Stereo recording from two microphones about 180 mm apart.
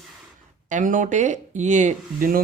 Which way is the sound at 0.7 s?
45° right (ahead or behind).